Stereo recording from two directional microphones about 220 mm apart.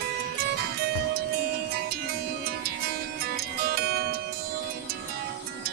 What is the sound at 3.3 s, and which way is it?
Music, 45° right (ahead or behind).